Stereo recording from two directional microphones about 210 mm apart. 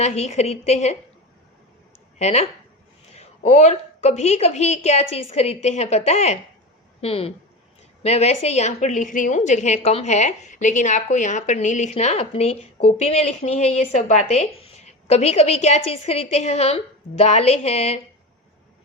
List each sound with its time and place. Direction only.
0.0 s a woman's voice: 35° left (ahead or behind)
2.1 s a woman's voice: 30° left (ahead or behind)